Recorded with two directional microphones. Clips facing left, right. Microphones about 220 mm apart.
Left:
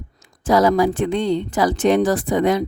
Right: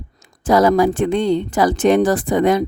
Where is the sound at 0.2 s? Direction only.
50° right (ahead or behind).